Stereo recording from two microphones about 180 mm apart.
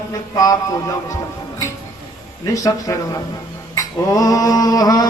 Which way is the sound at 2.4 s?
20° left (ahead or behind).